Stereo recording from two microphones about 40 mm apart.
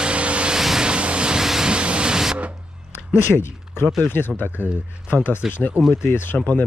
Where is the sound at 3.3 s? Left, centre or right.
Left.